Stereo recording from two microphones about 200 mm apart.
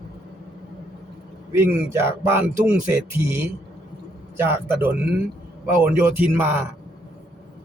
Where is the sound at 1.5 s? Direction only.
15° right (ahead or behind).